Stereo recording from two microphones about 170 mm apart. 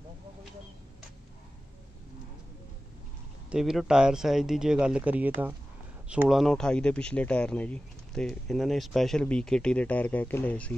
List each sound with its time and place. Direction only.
3.4 s speech: 5° right (ahead or behind)